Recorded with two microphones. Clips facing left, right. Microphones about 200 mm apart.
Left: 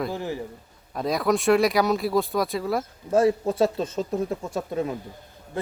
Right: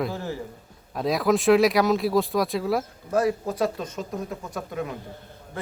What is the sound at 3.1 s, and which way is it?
Speech, 25° left (ahead or behind).